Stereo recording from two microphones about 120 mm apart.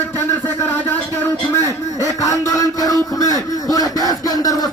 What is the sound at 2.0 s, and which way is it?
A man's voice, 30° left (ahead or behind).